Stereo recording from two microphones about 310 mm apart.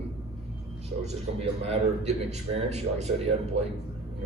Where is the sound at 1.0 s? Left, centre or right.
Centre.